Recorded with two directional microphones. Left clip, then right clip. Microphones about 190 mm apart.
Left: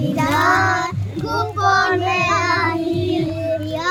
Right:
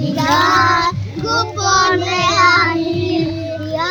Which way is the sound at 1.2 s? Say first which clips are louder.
Right 3 dB; 15° right (ahead or behind).